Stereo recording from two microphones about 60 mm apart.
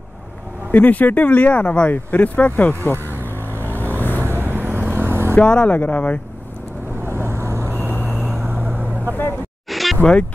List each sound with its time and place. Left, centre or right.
0.7 s speech: left
3.6 s vehicle: left
4.3 s vehicle: right
5.3 s speech: centre
7.1 s vehicle: right
7.9 s vehicle: left
8.5 s vehicle: right
9.7 s a sound: centre